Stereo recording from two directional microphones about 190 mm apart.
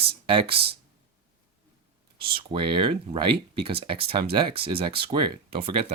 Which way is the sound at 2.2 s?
25° right (ahead or behind).